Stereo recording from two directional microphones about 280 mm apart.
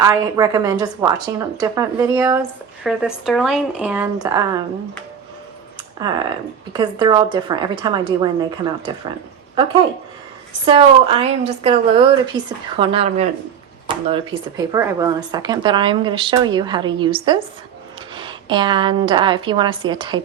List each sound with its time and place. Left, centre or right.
0.0 s a woman's voice: centre
5.7 s a sound: centre
6.7 s a woman's voice: centre
10.7 s a woman's voice: centre